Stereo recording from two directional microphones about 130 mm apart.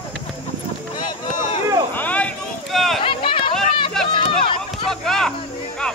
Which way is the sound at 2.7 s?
Centre (ahead or behind).